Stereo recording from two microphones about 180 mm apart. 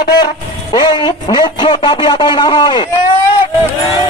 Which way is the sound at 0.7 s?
25° left (ahead or behind).